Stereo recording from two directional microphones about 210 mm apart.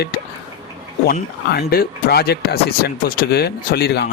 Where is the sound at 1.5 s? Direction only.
50° left (ahead or behind).